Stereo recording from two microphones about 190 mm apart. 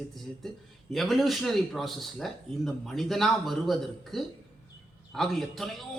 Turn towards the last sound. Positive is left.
turn(degrees=0)  # may be behind; listen again after turning